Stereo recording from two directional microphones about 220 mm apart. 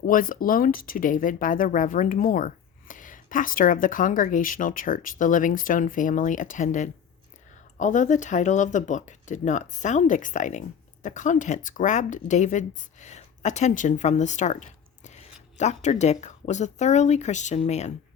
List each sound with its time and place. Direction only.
0.0 s speech: 40° left (ahead or behind)